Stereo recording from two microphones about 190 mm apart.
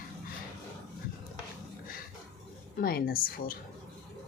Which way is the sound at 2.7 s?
50° left (ahead or behind).